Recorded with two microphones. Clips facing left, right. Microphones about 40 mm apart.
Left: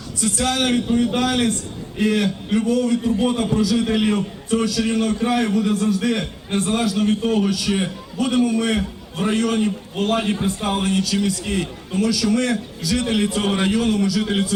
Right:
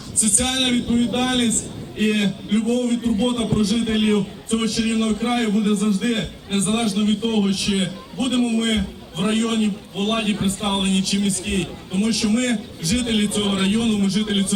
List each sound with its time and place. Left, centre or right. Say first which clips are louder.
0.2 s a man's voice: left 1 dB; right